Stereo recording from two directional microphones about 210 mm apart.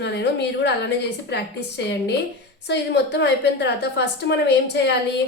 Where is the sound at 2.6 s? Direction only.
55° left (ahead or behind).